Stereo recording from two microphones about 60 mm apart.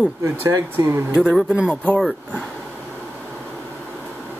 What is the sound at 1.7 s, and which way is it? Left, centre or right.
Speech, left.